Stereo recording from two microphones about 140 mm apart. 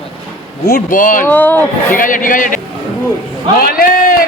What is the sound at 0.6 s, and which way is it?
Speech, 80° left.